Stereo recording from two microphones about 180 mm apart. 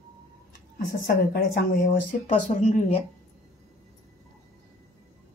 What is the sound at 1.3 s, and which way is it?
Speech, 55° left (ahead or behind).